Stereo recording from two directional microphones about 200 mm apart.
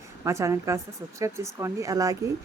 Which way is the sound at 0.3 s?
15° right (ahead or behind).